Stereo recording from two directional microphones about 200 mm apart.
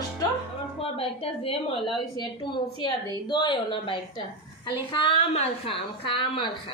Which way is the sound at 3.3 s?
25° left (ahead or behind).